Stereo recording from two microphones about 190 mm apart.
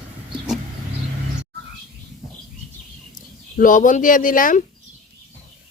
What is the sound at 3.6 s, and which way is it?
Speech, 45° left (ahead or behind).